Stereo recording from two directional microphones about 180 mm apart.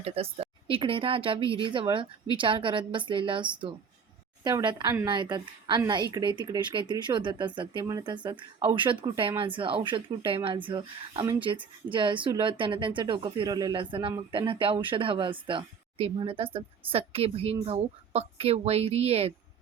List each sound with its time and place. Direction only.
0.0 s speech: 30° right (ahead or behind)